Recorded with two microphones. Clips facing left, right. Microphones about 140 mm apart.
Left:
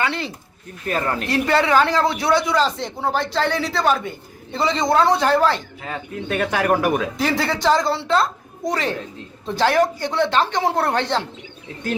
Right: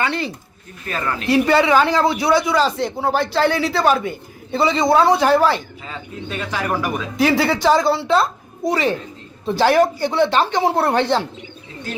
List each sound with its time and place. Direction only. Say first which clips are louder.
0.0 s a man's voice: right 2 dB; centre (ahead or behind)
0.9 s speech: left 2 dB; 50° left (ahead or behind)
1.3 s a man's voice: right 4 dB; 5° right (ahead or behind)
5.8 s a man's voice: left 2 dB; 60° left (ahead or behind)
7.2 s a woman's voice: right 4 dB; 10° right (ahead or behind)